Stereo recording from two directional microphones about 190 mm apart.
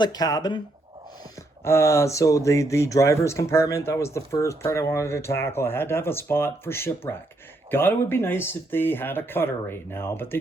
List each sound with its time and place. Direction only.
0.0 s speech: 20° left (ahead or behind)
1.6 s speech: 15° left (ahead or behind)